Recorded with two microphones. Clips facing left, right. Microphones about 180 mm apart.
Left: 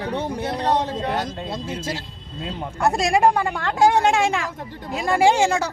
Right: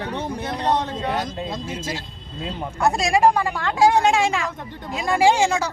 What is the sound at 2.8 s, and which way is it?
A woman's voice, 55° left (ahead or behind).